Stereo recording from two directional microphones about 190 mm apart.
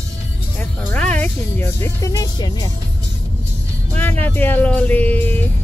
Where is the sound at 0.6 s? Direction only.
10° left (ahead or behind).